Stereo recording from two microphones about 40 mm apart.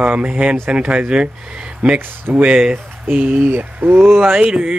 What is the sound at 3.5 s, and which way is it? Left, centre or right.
Speech, right.